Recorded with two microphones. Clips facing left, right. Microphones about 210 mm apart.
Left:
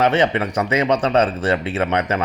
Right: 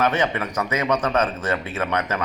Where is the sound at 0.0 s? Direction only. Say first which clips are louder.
Left 5 dB; 30° left (ahead or behind).